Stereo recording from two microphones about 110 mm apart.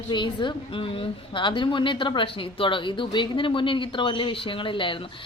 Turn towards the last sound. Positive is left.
turn(degrees=50)  # may be behind; listen again after turning